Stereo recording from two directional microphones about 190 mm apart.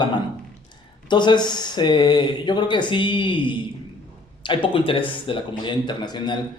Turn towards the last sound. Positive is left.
turn(degrees=25)  # may be behind; listen again after turning